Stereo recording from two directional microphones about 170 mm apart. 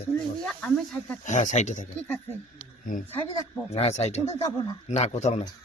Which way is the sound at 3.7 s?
40° left (ahead or behind).